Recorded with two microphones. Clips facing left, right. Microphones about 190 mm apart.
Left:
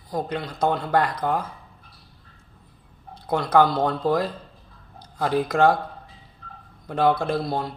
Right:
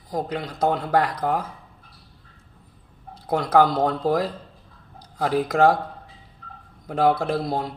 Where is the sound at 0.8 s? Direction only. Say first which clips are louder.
Right 1 dB; 5° right (ahead or behind).